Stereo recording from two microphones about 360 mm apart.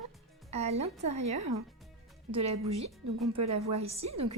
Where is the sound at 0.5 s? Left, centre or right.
Centre.